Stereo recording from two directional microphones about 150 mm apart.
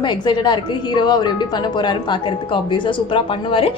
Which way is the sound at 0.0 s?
30° left (ahead or behind).